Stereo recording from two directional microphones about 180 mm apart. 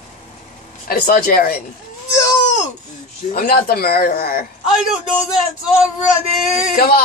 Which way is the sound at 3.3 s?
55° left (ahead or behind).